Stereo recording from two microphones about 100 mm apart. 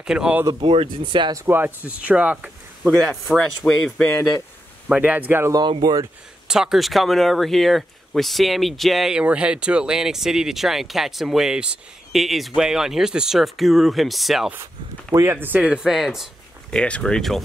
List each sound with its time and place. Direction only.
0.0 s speech: 10° right (ahead or behind)
0.6 s speech: 65° right (ahead or behind)
1.3 s speech: 25° right (ahead or behind)
2.9 s speech: centre (ahead or behind)
4.8 s speech: 10° right (ahead or behind)
5.7 s speech: 45° right (ahead or behind)
6.4 s speech: 5° right (ahead or behind)
15.4 s speech: 15° right (ahead or behind)
16.7 s speech: 10° left (ahead or behind)